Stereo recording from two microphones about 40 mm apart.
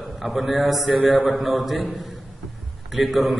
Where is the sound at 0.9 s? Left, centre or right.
Right.